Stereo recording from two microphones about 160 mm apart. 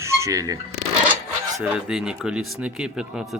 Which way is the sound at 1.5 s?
5° right (ahead or behind).